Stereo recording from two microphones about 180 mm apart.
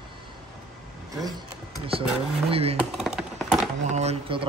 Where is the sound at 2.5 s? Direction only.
35° right (ahead or behind).